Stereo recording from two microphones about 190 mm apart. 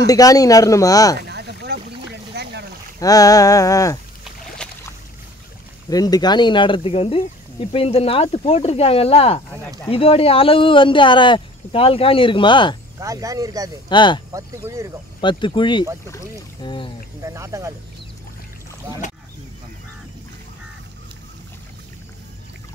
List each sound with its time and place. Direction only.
0.0 s speech: 20° left (ahead or behind)
1.2 s boat: 60° right (ahead or behind)
3.0 s speech: 20° left (ahead or behind)
4.6 s boat: 5° left (ahead or behind)
5.9 s speech: 20° left (ahead or behind)
13.0 s speech: 15° right (ahead or behind)
13.8 s speech: 25° left (ahead or behind)
14.3 s speech: 15° right (ahead or behind)
15.1 s speech: 25° left (ahead or behind)
17.2 s speech: 15° right (ahead or behind)